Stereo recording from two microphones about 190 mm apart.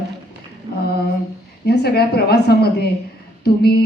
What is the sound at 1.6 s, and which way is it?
A woman's voice, 60° left (ahead or behind).